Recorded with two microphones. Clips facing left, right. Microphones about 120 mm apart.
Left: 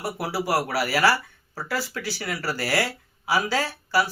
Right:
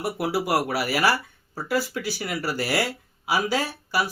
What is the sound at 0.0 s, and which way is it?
Speech, 20° right (ahead or behind).